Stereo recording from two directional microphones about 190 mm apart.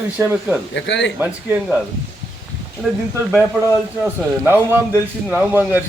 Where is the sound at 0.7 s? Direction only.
70° left (ahead or behind).